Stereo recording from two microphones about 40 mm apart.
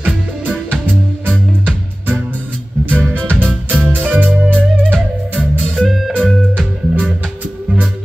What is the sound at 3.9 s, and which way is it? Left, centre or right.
Music, right.